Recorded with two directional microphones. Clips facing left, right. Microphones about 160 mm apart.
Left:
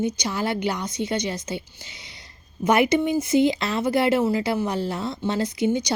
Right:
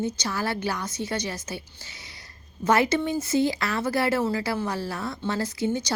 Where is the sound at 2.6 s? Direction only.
15° left (ahead or behind).